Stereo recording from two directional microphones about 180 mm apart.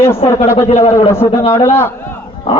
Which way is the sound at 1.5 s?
15° left (ahead or behind).